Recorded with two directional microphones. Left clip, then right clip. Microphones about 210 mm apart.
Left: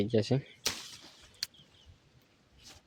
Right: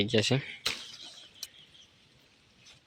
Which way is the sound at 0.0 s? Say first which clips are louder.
Right 3 dB; 10° left (ahead or behind).